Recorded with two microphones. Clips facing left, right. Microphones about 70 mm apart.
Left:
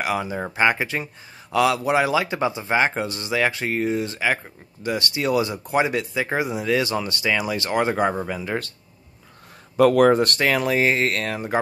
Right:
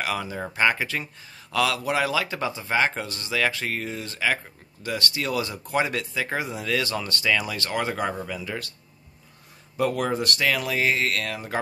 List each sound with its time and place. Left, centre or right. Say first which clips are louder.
0.0 s speech: left 4 dB; centre; by 8.7 s left
9.8 s speech: left 10 dB; left